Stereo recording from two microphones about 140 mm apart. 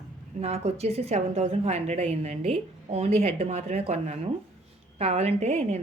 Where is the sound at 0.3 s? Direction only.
50° right (ahead or behind).